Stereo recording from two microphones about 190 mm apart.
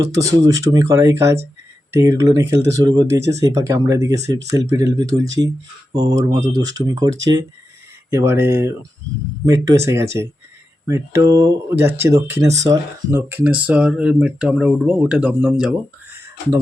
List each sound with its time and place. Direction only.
0.0 s speech: 20° right (ahead or behind)